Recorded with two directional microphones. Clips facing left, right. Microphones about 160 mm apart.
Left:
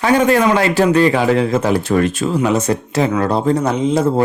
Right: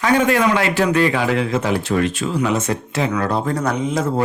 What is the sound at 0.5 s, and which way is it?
Speech, 35° left (ahead or behind).